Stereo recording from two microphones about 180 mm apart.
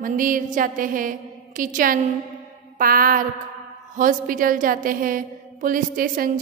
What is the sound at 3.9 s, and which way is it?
A woman's voice, 50° right (ahead or behind).